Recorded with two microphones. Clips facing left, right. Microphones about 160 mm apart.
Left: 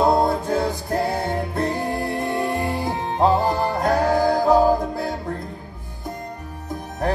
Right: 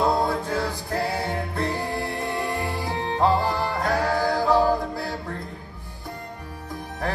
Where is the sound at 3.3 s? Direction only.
45° left (ahead or behind).